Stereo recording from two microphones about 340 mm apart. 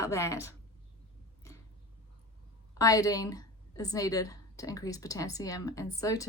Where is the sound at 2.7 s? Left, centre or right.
Centre.